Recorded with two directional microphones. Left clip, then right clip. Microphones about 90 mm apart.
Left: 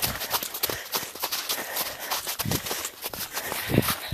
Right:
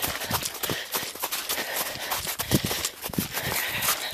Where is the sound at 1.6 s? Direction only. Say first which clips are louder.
Right 2 dB; 20° right (ahead or behind).